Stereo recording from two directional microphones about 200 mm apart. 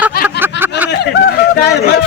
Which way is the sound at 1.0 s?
55° left (ahead or behind).